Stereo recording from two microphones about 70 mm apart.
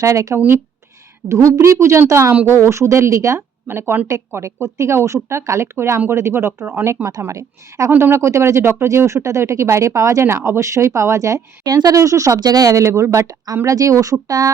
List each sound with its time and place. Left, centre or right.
0.0 s speech: right
0.3 s speech: right
1.3 s speech: right
11.6 s speech: right
12.4 s speech: right